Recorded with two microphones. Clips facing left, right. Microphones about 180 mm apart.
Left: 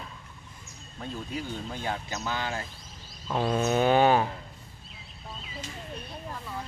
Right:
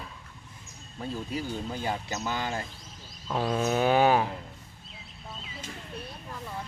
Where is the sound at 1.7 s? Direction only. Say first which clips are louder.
Even; 10° right (ahead or behind).